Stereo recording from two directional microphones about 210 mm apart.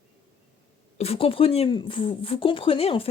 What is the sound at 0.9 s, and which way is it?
Speech, 30° left (ahead or behind).